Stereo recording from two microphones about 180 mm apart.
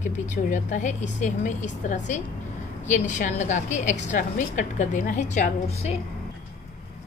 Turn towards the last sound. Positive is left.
turn(degrees=35)  # may be behind; listen again after turning